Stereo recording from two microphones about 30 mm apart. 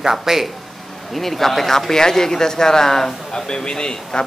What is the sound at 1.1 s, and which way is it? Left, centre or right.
Speech, centre.